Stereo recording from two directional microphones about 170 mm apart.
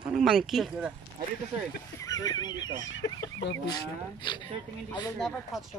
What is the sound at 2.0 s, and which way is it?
Fowl, 20° left (ahead or behind).